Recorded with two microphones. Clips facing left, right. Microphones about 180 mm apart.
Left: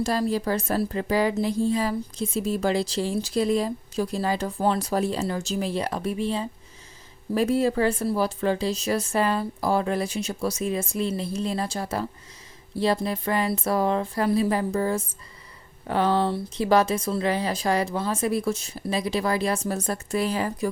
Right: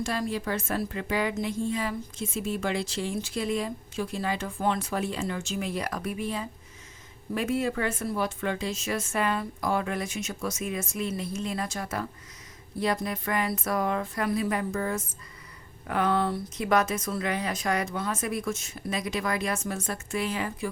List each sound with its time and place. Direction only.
0.0 s a woman's voice: 35° left (ahead or behind)